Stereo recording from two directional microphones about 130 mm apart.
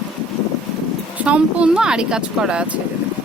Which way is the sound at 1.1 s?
10° right (ahead or behind).